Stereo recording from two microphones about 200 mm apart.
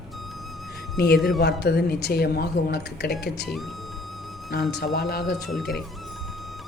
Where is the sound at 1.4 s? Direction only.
55° left (ahead or behind).